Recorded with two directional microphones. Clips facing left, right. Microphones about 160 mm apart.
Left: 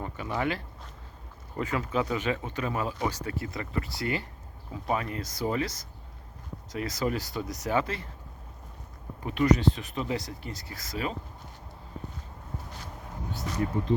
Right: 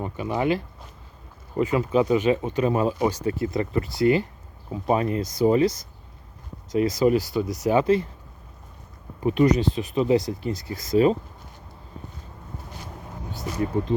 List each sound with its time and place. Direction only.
0.0 s speech: 15° right (ahead or behind)
9.2 s speech: 20° right (ahead or behind)